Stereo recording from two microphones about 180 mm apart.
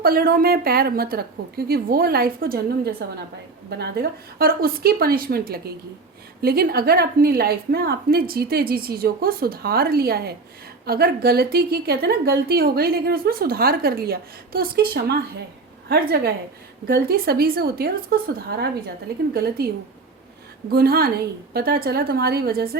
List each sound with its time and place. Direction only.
0.0 s a woman's voice: 55° right (ahead or behind)